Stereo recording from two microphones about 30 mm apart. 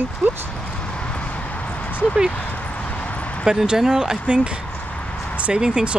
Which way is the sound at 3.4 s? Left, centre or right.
Centre.